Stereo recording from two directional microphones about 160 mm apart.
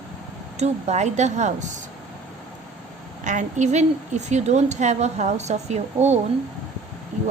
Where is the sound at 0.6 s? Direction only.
45° right (ahead or behind).